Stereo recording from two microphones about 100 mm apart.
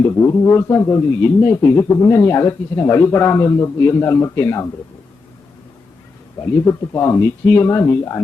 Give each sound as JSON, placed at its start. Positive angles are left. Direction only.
{"t": 0.0, "sound": "a man's voice", "side_deg": 25}
{"t": 6.4, "sound": "a man's voice", "side_deg": 30}